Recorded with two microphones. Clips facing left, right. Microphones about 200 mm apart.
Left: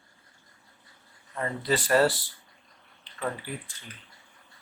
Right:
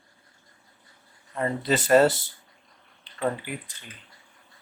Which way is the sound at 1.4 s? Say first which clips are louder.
Right 4 dB; 25° right (ahead or behind).